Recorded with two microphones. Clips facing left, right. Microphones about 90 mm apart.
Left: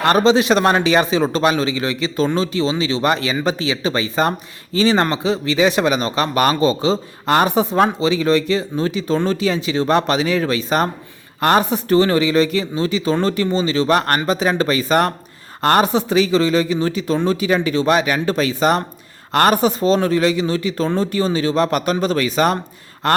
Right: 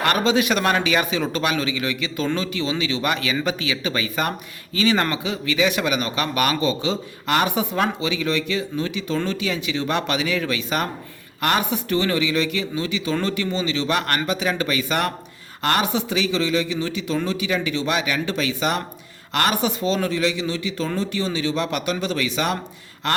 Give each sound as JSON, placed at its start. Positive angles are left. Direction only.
{"t": 0.0, "sound": "speech", "side_deg": 30}